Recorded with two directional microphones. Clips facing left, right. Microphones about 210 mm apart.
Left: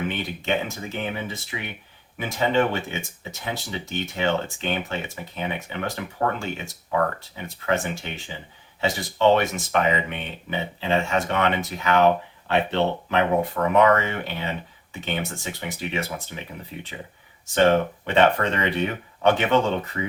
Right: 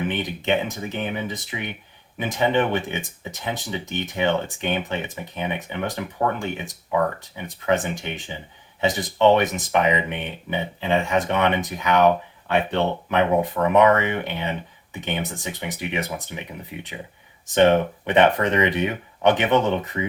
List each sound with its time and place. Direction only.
0.1 s speech: 20° right (ahead or behind)
7.2 s speech: 20° right (ahead or behind)